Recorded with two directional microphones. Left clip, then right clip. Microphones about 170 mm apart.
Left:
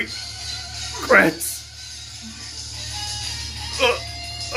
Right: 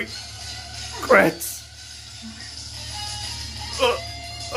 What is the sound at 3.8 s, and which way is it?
Music, 15° right (ahead or behind).